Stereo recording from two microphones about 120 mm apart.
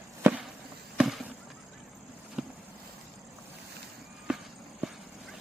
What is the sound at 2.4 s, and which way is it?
Vehicle, 5° right (ahead or behind).